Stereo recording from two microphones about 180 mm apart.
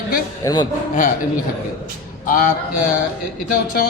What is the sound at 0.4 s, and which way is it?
Speech, 20° left (ahead or behind).